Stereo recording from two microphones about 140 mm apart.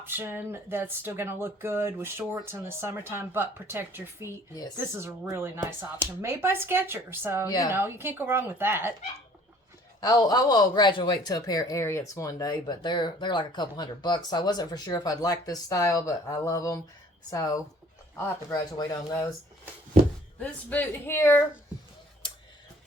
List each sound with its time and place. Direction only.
0.0 s speech: 15° right (ahead or behind)
10.0 s speech: 30° left (ahead or behind)
20.4 s speech: 10° left (ahead or behind)